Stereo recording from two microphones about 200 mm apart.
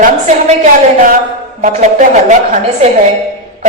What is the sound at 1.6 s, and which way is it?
Speech, 40° right (ahead or behind).